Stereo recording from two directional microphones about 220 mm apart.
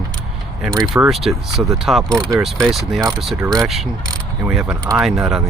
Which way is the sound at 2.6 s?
Centre (ahead or behind).